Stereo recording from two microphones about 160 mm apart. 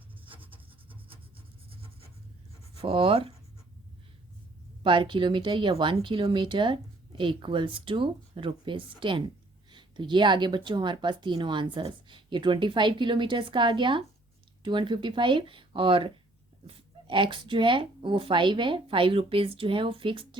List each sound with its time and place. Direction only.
1.7 s writing: 35° right (ahead or behind)
2.8 s speech: 35° right (ahead or behind)
4.8 s speech: 30° right (ahead or behind)